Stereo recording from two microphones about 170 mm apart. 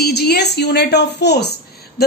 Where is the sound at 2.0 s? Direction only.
70° left (ahead or behind).